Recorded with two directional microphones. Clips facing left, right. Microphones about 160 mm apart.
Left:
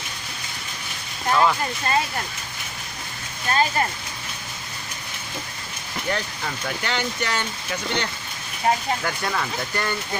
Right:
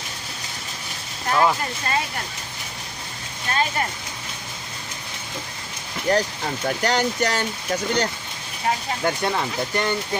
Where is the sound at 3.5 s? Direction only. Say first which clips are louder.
Left 2 dB; 35° left (ahead or behind).